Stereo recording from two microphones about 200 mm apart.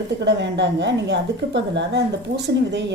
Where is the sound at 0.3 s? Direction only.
60° right (ahead or behind).